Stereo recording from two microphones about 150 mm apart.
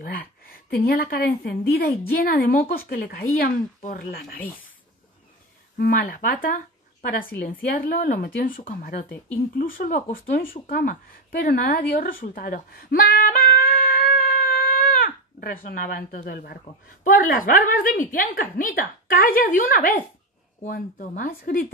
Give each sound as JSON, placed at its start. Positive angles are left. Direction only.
{"t": 0.0, "sound": "a woman's voice", "side_deg": 80}
{"t": 5.8, "sound": "a woman's voice", "side_deg": 65}
{"t": 9.9, "sound": "speech", "side_deg": 50}
{"t": 10.4, "sound": "a woman's voice", "side_deg": 70}
{"t": 17.0, "sound": "a woman's voice", "side_deg": 65}